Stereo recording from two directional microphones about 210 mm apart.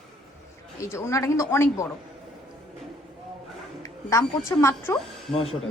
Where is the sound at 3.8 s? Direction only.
15° left (ahead or behind).